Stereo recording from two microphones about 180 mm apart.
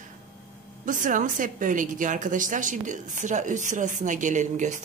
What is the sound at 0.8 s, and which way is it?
A woman's voice, 45° right (ahead or behind).